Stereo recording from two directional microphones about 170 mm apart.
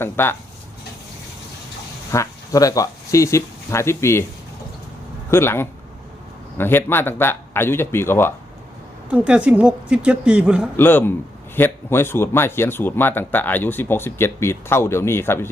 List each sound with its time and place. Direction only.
0.0 s speech: 15° left (ahead or behind)
2.1 s speech: 20° left (ahead or behind)
5.3 s speech: 15° left (ahead or behind)
9.0 s a woman's voice: 5° right (ahead or behind)
10.8 s speech: 10° left (ahead or behind)